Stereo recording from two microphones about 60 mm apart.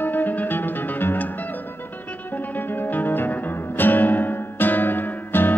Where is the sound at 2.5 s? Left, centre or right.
Left.